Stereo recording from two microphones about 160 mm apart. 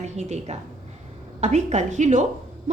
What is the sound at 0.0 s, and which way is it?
A woman's voice, 45° right (ahead or behind).